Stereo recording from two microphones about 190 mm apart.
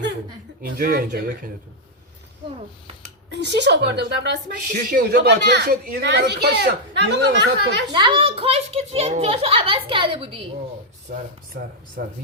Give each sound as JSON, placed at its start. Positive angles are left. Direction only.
{"t": 0.6, "sound": "speech", "side_deg": -50}
{"t": 3.2, "sound": "speech", "side_deg": -65}
{"t": 4.7, "sound": "speech", "side_deg": -50}
{"t": 7.9, "sound": "a child's voice", "side_deg": -25}
{"t": 11.1, "sound": "speech", "side_deg": -55}